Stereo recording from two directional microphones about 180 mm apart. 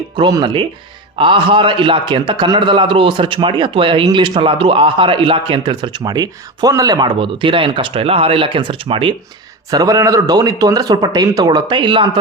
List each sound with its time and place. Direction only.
0.2 s a man's voice: 25° right (ahead or behind)